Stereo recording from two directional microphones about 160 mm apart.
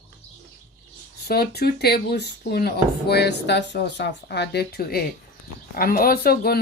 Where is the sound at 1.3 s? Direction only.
75° left (ahead or behind).